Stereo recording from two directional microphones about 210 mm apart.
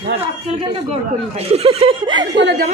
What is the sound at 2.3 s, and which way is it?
Speech, 55° right (ahead or behind).